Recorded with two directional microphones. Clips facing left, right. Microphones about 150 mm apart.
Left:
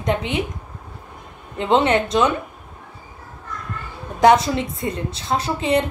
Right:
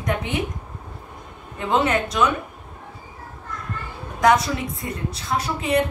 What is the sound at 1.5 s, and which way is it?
Speech, 25° left (ahead or behind).